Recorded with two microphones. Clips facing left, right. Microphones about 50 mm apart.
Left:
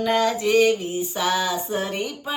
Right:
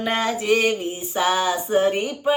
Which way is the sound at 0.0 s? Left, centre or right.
Right.